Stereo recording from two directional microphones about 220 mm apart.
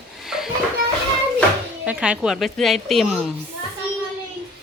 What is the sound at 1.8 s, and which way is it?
Speech, 5° right (ahead or behind).